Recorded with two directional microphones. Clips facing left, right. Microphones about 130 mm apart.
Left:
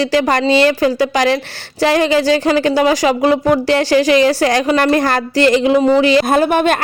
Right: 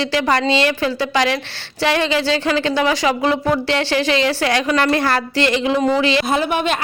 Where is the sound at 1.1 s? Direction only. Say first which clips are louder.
Left 4 dB; 40° left (ahead or behind).